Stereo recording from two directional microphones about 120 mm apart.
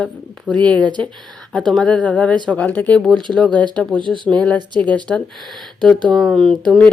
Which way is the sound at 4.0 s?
40° right (ahead or behind).